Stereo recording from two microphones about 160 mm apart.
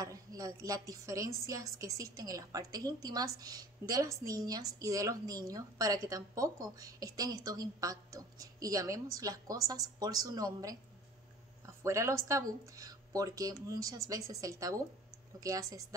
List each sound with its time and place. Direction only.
0.0 s a woman's voice: 20° right (ahead or behind)
11.8 s a woman's voice: 20° right (ahead or behind)